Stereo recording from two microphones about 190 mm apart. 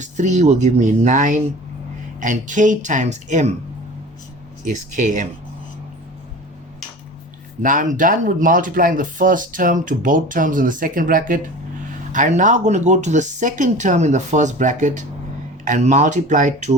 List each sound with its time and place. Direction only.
0.0 s speech: 40° right (ahead or behind)
4.6 s speech: 40° right (ahead or behind)
7.6 s speech: 45° right (ahead or behind)